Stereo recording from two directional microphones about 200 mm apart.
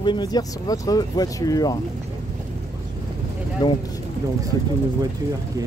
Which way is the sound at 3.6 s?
20° left (ahead or behind).